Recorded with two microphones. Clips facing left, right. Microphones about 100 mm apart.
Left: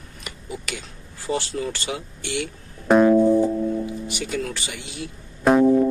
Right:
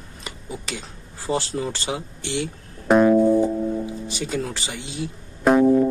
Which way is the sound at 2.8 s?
Centre (ahead or behind).